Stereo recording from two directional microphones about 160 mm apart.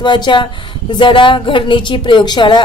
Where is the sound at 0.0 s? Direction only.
30° left (ahead or behind).